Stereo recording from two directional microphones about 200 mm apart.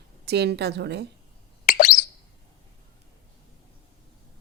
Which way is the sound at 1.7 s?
40° left (ahead or behind).